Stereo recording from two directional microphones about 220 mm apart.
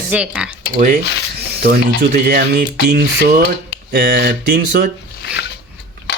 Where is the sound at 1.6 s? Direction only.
45° right (ahead or behind).